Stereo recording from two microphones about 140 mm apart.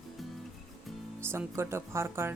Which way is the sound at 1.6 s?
20° right (ahead or behind).